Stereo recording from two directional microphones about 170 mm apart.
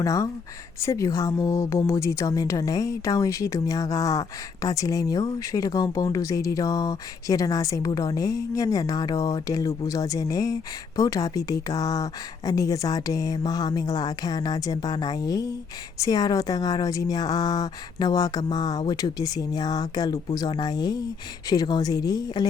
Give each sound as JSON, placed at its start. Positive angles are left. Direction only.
{"t": 0.0, "sound": "speech", "side_deg": 20}